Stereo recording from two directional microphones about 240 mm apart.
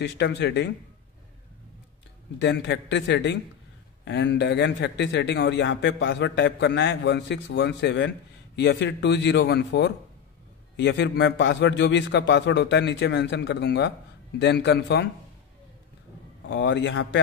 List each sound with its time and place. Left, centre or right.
0.0 s a man's voice: left
2.4 s a man's voice: left
16.4 s a man's voice: left